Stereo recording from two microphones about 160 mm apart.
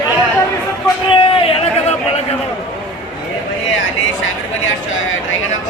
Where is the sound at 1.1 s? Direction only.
35° left (ahead or behind).